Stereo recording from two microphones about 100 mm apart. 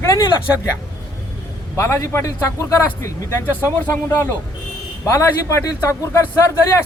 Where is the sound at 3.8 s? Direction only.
20° left (ahead or behind).